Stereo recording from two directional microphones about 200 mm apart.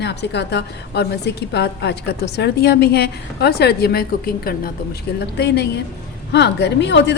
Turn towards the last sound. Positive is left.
turn(degrees=60)  # may be behind; listen again after turning